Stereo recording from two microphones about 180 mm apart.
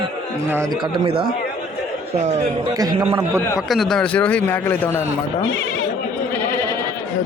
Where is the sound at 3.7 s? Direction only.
Centre (ahead or behind).